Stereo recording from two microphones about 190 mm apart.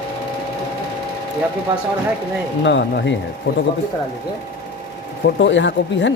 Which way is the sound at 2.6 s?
70° left (ahead or behind).